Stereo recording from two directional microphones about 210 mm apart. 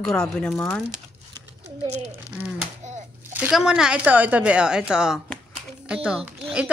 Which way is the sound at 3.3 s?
5° right (ahead or behind).